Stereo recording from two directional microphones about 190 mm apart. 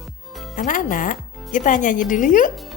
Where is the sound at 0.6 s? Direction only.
45° left (ahead or behind).